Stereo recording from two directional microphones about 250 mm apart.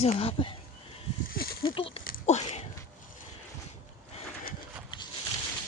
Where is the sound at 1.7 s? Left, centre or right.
Left.